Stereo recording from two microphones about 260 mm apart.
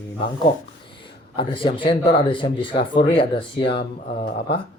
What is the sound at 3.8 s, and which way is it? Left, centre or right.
Speech, left.